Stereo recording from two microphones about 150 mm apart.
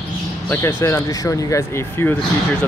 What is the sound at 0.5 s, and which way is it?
Speech, 20° left (ahead or behind).